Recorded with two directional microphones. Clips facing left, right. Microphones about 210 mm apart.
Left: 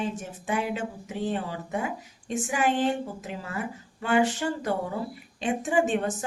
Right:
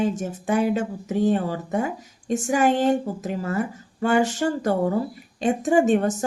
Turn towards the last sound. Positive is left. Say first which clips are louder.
# right 6 dB
turn(degrees=-45)  # may be behind; listen again after turning